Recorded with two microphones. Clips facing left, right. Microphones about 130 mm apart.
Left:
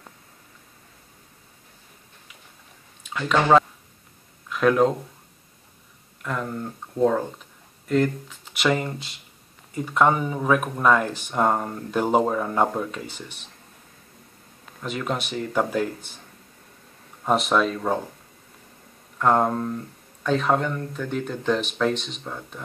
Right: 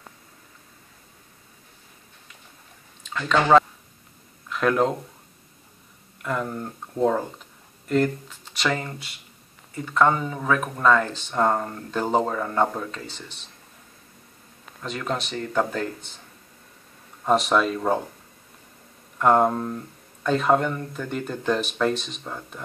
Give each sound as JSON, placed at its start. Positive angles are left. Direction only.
{"t": 3.1, "sound": "speech", "side_deg": 10}
{"t": 6.2, "sound": "speech", "side_deg": -5}
{"t": 8.5, "sound": "speech", "side_deg": 15}
{"t": 14.8, "sound": "speech", "side_deg": 5}
{"t": 17.2, "sound": "speech", "side_deg": 0}
{"t": 19.1, "sound": "speech", "side_deg": -5}